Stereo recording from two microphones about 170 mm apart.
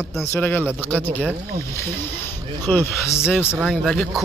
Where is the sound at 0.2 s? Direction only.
15° left (ahead or behind).